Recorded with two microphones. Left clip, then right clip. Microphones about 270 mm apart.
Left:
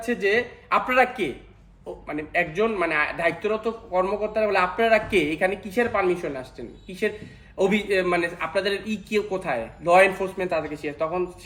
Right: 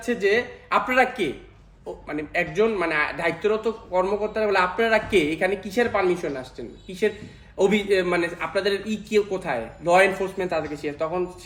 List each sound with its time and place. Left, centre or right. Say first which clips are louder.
0.0 s a man's voice: right 1 dB; centre